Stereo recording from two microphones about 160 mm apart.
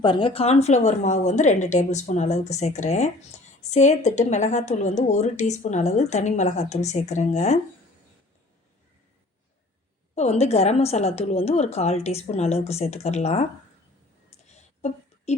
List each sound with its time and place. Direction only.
0.0 s a woman's voice: 30° left (ahead or behind)
10.2 s a woman's voice: 45° left (ahead or behind)
14.3 s a sound: 45° left (ahead or behind)